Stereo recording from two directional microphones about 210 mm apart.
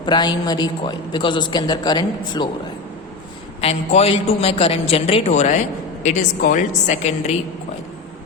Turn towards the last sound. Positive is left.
turn(degrees=30)  # may be behind; listen again after turning